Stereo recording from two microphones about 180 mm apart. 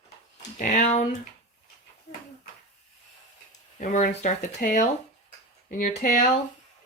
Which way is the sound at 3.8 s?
45° left (ahead or behind).